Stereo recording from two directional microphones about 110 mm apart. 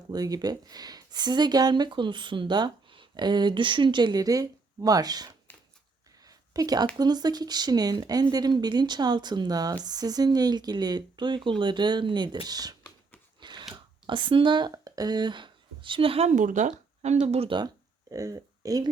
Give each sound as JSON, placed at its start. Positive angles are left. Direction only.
{"t": 0.1, "sound": "speech", "side_deg": -35}
{"t": 5.5, "sound": "a sound", "side_deg": 15}
{"t": 6.2, "sound": "a sound", "side_deg": -35}
{"t": 6.9, "sound": "speech", "side_deg": -40}
{"t": 13.4, "sound": "chewing", "side_deg": -40}
{"t": 14.1, "sound": "speech", "side_deg": -50}
{"t": 17.2, "sound": "speech", "side_deg": -70}
{"t": 18.1, "sound": "speech", "side_deg": -30}